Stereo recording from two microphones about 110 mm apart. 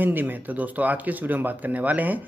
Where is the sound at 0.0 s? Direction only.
15° right (ahead or behind).